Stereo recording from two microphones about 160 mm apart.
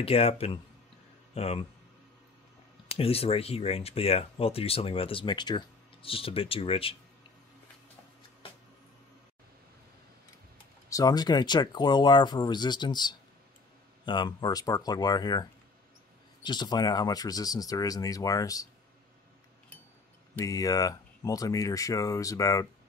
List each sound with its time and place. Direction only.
0.0 s speech: 40° left (ahead or behind)
3.0 s speech: 40° left (ahead or behind)
10.9 s speech: 25° left (ahead or behind)
16.4 s speech: 25° left (ahead or behind)
20.3 s speech: 20° left (ahead or behind)